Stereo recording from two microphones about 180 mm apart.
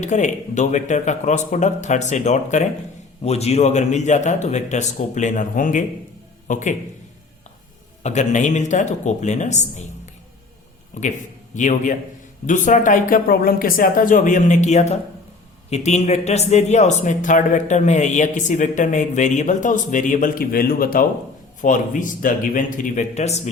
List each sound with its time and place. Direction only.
0.0 s a man's voice: 40° left (ahead or behind)
8.0 s speech: 40° left (ahead or behind)
10.9 s a man's voice: 40° left (ahead or behind)